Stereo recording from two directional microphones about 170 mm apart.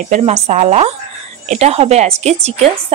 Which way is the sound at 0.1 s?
40° right (ahead or behind).